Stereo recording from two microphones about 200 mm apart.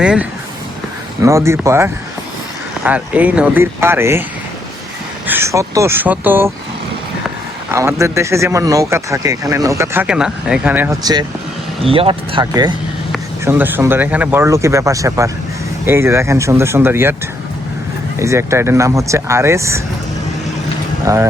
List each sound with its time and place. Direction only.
0.0 s a man's voice: 5° right (ahead or behind)
5.2 s a man's voice: 10° right (ahead or behind)
7.7 s a man's voice: 15° right (ahead or behind)
13.4 s a man's voice: 10° right (ahead or behind)
18.2 s a man's voice: 15° right (ahead or behind)
21.0 s speech: 15° right (ahead or behind)